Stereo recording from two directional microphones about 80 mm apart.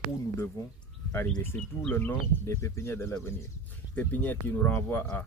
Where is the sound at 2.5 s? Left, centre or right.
Left.